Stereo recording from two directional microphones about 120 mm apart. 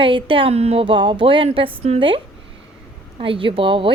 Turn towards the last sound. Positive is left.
turn(degrees=-50)  # may be behind; listen again after turning